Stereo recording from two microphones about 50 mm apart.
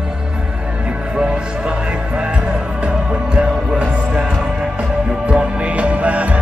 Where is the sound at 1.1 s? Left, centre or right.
Centre.